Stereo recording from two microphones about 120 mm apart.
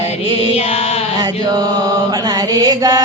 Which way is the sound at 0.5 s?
55° left (ahead or behind).